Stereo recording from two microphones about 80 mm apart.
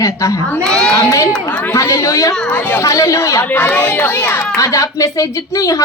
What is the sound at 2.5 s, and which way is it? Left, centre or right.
Speech, left.